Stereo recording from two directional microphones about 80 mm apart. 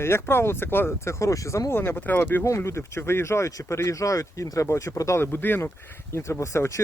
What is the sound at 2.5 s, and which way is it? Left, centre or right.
Speech, left.